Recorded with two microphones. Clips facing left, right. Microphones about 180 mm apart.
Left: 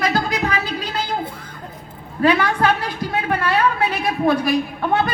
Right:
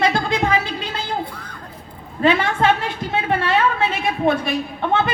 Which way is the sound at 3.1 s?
25° right (ahead or behind).